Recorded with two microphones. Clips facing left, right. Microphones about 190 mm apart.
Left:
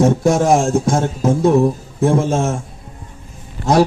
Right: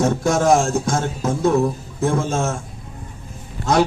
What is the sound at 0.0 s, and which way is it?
A man's voice, 30° left (ahead or behind).